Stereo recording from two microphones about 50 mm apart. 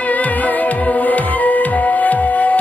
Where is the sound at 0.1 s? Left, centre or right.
Left.